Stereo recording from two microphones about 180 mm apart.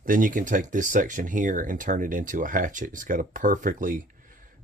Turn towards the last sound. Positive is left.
turn(degrees=-50)  # may be behind; listen again after turning